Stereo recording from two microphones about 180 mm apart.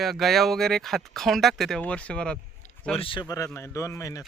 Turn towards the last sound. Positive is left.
turn(degrees=20)  # may be behind; listen again after turning